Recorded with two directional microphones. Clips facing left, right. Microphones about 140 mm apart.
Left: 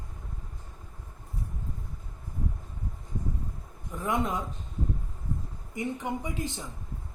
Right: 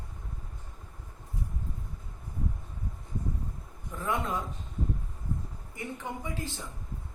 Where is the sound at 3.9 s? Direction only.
15° left (ahead or behind).